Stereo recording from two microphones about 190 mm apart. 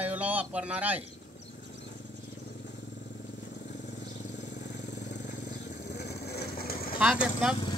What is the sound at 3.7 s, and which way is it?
Vehicle, 40° left (ahead or behind).